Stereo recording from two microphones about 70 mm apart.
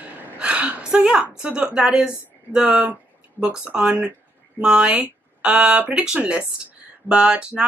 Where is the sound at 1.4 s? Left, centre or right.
Centre.